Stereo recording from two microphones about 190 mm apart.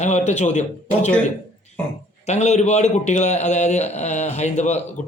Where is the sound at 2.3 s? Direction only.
35° left (ahead or behind).